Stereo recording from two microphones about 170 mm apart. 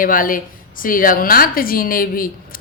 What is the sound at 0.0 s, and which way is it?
A woman's voice, 55° left (ahead or behind).